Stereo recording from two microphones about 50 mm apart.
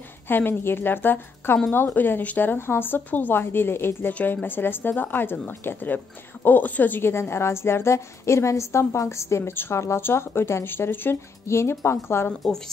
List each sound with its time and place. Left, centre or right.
0.3 s a woman's voice: left
9.8 s speech: left
10.0 s a woman's voice: left
11.4 s a woman's voice: left